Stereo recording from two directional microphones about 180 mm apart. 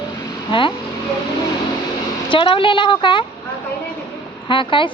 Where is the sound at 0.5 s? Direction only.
30° left (ahead or behind).